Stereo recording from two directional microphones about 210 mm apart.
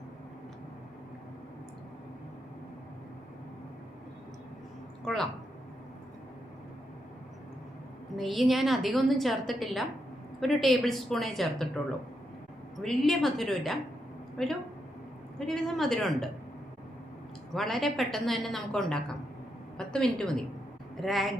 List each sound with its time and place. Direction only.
5.0 s a woman's voice: centre (ahead or behind)
8.1 s a woman's voice: centre (ahead or behind)
12.8 s a woman's voice: centre (ahead or behind)
15.4 s a woman's voice: centre (ahead or behind)
17.5 s a woman's voice: centre (ahead or behind)